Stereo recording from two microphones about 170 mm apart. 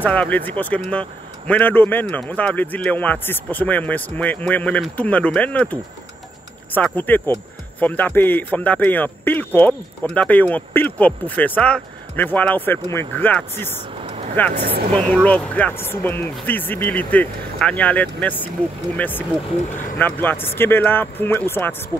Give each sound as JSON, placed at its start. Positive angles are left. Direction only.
{"t": 0.0, "sound": "speech", "side_deg": 10}